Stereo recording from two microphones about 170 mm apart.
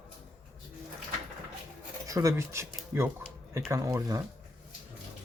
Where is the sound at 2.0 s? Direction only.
20° right (ahead or behind).